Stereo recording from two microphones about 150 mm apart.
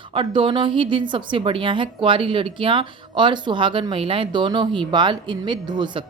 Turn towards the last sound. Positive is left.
turn(degrees=-30)  # may be behind; listen again after turning